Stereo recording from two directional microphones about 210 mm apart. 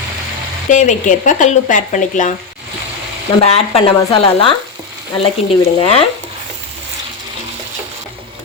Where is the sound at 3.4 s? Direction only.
30° left (ahead or behind).